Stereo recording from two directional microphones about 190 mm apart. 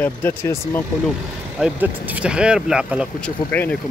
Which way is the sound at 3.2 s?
10° left (ahead or behind).